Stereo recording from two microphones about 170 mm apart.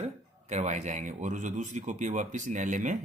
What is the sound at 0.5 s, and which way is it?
Speech, 45° right (ahead or behind).